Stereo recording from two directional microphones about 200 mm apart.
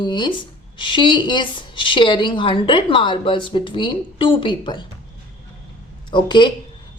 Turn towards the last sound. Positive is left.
turn(degrees=25)  # may be behind; listen again after turning